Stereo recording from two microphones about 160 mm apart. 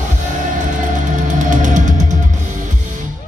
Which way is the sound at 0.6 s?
50° right (ahead or behind).